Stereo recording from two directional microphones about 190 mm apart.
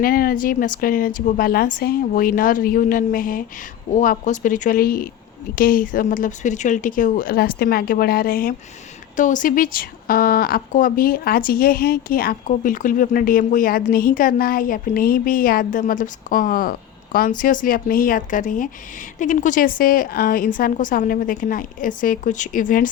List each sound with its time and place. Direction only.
0.0 s speech: 50° left (ahead or behind)